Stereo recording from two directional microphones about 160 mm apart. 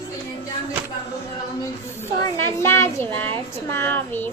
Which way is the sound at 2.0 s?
15° left (ahead or behind).